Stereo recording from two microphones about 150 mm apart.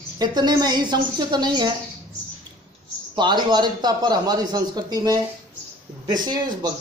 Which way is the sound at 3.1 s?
30° right (ahead or behind).